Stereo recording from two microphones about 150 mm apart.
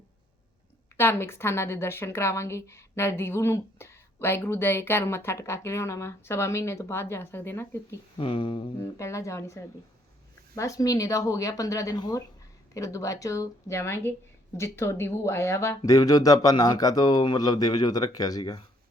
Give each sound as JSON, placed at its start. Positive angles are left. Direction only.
{"t": 0.9, "sound": "a woman's voice", "side_deg": 15}
{"t": 8.2, "sound": "a sound", "side_deg": 35}
{"t": 8.8, "sound": "a woman's voice", "side_deg": 20}